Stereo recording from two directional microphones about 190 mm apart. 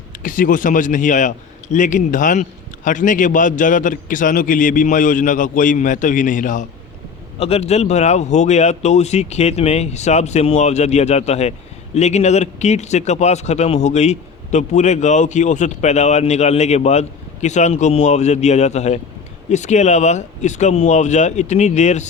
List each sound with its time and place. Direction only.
0.2 s a man's voice: 45° left (ahead or behind)